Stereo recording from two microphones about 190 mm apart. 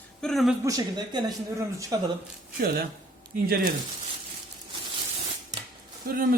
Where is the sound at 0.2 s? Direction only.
Centre (ahead or behind).